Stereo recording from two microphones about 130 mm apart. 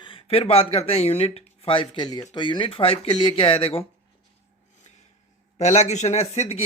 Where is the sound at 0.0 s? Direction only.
40° left (ahead or behind).